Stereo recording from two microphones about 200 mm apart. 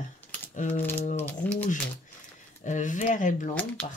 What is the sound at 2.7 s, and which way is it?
Speech, 40° left (ahead or behind).